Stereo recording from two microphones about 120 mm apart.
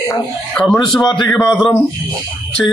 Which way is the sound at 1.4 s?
5° left (ahead or behind).